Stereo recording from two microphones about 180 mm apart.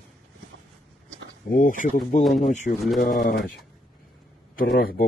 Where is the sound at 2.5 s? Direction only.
40° left (ahead or behind).